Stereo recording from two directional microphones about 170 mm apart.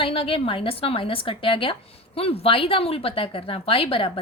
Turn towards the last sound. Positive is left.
turn(degrees=30)  # may be behind; listen again after turning